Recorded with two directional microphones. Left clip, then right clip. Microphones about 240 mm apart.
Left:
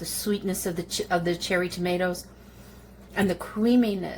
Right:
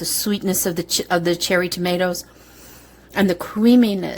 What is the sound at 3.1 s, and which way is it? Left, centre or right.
A woman's voice, right.